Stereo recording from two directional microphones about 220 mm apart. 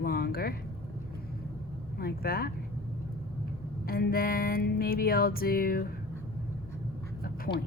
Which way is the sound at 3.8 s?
40° left (ahead or behind).